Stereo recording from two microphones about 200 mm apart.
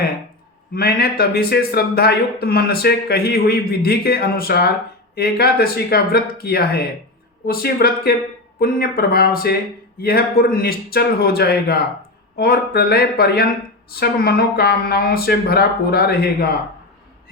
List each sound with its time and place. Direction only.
0.7 s a man's voice: 50° left (ahead or behind)